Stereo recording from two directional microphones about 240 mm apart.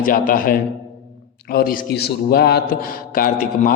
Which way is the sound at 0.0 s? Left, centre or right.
Left.